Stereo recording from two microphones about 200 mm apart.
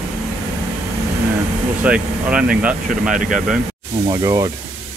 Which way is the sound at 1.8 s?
5° right (ahead or behind).